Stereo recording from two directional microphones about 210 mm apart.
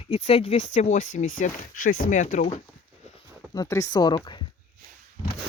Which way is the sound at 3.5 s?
15° left (ahead or behind).